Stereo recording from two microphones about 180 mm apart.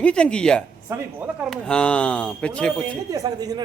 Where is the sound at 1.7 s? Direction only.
5° left (ahead or behind).